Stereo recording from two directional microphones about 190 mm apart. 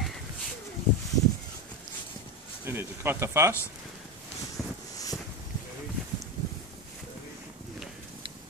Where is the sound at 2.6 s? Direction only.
10° right (ahead or behind).